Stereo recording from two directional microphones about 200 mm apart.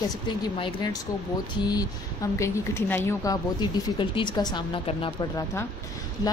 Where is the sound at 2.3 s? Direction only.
15° left (ahead or behind).